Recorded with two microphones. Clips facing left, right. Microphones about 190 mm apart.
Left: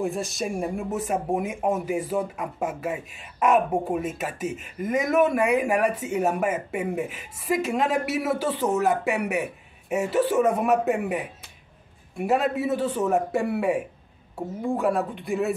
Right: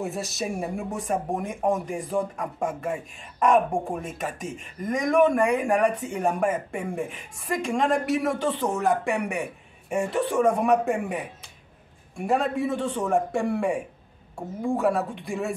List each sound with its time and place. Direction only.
0.0 s speech: centre (ahead or behind)